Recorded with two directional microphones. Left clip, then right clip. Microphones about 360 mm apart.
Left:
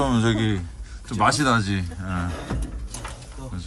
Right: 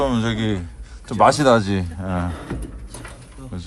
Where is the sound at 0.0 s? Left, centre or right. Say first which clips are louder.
Right 1 dB; centre.